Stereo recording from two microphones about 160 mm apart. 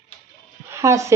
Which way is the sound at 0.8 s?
20° right (ahead or behind).